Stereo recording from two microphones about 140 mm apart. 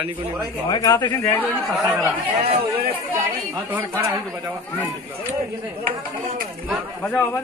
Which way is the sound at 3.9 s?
25° right (ahead or behind).